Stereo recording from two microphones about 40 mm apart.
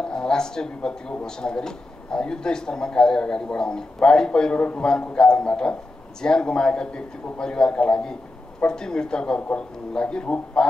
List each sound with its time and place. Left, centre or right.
0.0 s speech: centre